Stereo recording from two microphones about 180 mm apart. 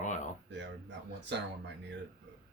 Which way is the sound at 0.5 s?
75° right (ahead or behind).